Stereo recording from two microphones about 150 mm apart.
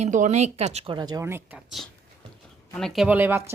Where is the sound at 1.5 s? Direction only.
Centre (ahead or behind).